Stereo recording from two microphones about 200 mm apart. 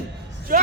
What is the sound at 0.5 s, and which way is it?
Speech, 45° right (ahead or behind).